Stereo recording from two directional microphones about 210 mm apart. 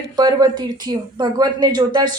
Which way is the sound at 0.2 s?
20° right (ahead or behind).